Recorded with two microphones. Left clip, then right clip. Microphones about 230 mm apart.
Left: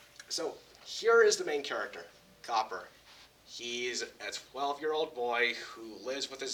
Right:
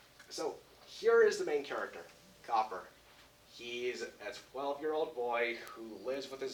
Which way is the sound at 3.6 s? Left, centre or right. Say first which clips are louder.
Left 3 dB; left.